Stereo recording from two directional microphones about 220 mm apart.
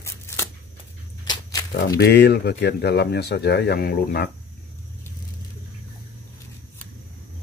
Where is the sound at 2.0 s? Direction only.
50° left (ahead or behind).